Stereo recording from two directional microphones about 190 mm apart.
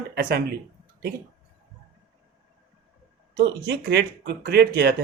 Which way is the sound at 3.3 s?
60° right (ahead or behind).